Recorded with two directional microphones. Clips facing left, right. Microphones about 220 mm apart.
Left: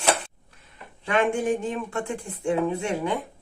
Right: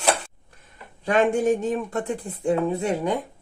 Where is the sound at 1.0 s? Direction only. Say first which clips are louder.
Right 3 dB; 40° right (ahead or behind).